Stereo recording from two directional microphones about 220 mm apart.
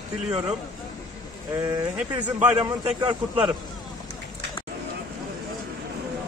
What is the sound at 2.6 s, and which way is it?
Speech, 20° right (ahead or behind).